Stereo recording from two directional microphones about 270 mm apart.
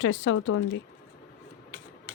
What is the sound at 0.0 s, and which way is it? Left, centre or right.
Speech, left.